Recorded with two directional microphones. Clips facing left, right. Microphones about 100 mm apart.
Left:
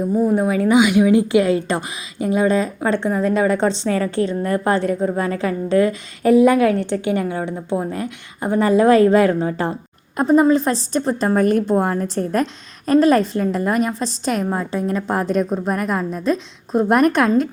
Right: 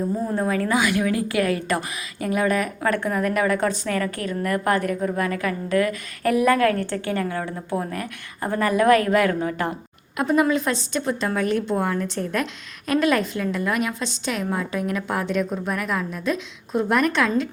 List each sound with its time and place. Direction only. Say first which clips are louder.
0.3 s a woman's voice: left 6 dB; 15° left (ahead or behind); by 17.5 s 45° left (ahead or behind)